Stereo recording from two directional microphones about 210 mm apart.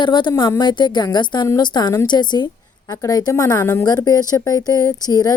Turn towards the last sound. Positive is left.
turn(degrees=20)  # may be behind; listen again after turning